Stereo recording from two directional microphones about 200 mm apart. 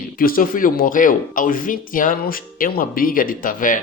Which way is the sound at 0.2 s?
45° left (ahead or behind).